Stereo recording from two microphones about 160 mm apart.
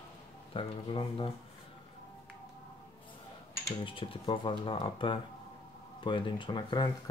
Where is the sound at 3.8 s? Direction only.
35° left (ahead or behind).